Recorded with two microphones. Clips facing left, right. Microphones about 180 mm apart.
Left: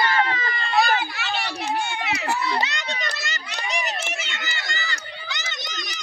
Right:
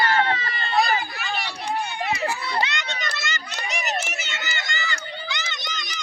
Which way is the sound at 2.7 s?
35° left (ahead or behind).